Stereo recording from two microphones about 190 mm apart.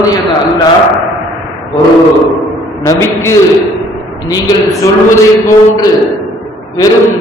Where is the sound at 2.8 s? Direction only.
15° left (ahead or behind).